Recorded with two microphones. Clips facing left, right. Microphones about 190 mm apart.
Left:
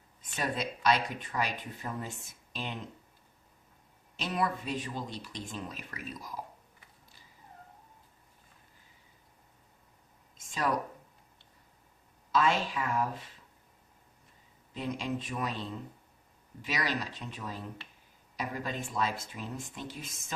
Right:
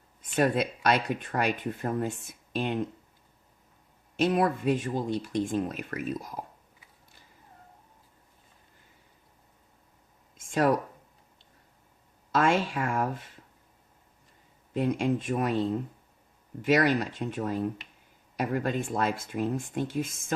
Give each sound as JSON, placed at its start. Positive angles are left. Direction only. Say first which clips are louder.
{"t": 0.2, "sound": "speech", "louder": "right 9 dB", "side_deg": -55}
{"t": 4.2, "sound": "speech", "louder": "right 8 dB", "side_deg": -55}
{"t": 12.3, "sound": "speech", "louder": "right 4 dB", "side_deg": -50}
{"t": 14.7, "sound": "speech", "louder": "right 8 dB", "side_deg": -55}